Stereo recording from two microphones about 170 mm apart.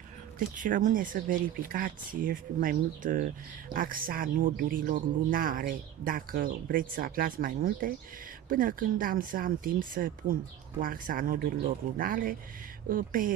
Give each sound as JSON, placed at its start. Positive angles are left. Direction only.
{"t": 0.6, "sound": "speech", "side_deg": -50}